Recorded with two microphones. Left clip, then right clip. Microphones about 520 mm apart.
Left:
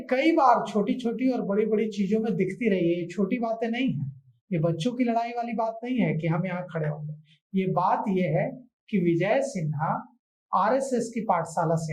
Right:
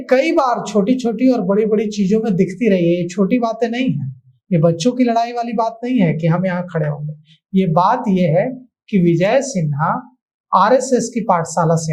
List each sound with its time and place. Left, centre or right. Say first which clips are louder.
0.1 s speech: right 6 dB; right